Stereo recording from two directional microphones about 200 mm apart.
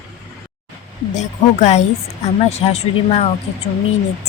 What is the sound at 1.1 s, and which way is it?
Speech, 35° left (ahead or behind).